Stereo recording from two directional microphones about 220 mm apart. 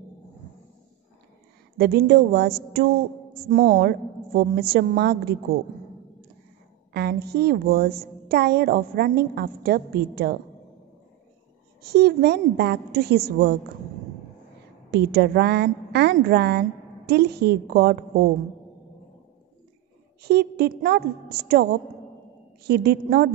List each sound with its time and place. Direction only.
1.8 s a woman's voice: 45° right (ahead or behind)
6.9 s a woman's voice: 45° right (ahead or behind)
11.8 s a woman's voice: 45° right (ahead or behind)
14.9 s a woman's voice: 45° right (ahead or behind)
20.2 s a woman's voice: 45° right (ahead or behind)